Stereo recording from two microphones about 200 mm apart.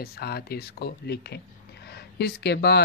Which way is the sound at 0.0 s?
50° left (ahead or behind).